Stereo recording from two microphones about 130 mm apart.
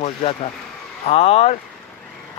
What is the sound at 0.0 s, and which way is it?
Speech, 50° left (ahead or behind).